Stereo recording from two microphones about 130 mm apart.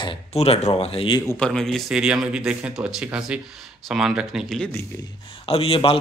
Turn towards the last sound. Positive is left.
turn(degrees=45)  # may be behind; listen again after turning